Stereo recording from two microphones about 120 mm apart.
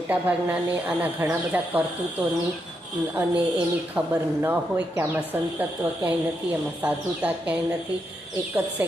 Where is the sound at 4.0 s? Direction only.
10° right (ahead or behind).